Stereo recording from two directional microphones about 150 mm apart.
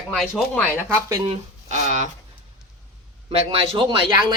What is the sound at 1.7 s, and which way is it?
Speech, 50° right (ahead or behind).